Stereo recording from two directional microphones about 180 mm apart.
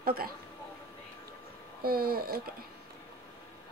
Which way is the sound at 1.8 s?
60° right (ahead or behind).